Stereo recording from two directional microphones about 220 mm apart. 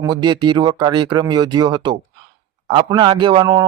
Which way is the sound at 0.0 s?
20° right (ahead or behind).